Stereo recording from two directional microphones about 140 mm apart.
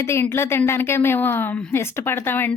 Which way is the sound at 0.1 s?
20° left (ahead or behind).